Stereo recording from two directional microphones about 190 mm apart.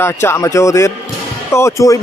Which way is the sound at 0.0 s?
15° left (ahead or behind).